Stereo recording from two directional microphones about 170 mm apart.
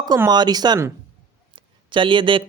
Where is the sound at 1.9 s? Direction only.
30° right (ahead or behind).